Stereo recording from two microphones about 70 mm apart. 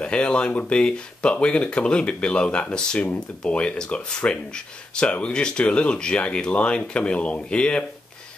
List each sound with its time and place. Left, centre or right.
0.0 s speech: centre